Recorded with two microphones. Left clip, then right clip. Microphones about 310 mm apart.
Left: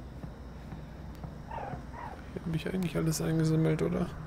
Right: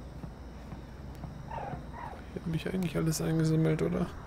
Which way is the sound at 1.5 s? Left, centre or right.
Centre.